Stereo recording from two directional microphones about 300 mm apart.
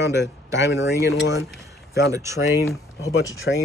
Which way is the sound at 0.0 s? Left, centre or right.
Centre.